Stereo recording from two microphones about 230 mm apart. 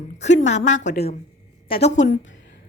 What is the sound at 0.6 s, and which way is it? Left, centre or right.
Speech, left.